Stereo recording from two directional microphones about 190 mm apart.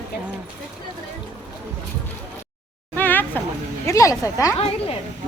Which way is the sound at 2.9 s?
10° left (ahead or behind).